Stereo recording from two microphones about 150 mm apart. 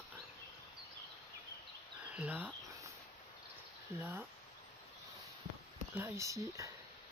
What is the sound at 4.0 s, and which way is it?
Speech, 15° right (ahead or behind).